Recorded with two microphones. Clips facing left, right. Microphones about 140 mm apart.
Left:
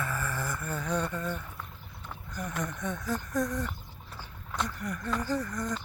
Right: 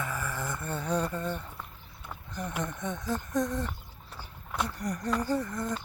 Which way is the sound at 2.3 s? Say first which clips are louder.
Right 1 dB; 25° right (ahead or behind).